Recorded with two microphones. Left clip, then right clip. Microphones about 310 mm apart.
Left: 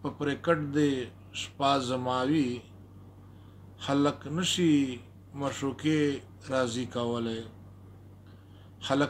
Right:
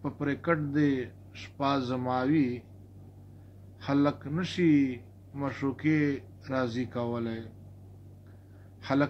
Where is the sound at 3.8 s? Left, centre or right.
Centre.